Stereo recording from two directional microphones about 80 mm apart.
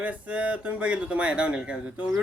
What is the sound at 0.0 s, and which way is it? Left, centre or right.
Speech, centre.